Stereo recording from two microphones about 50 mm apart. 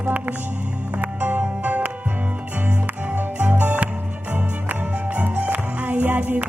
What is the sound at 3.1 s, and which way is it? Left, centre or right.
Music, right.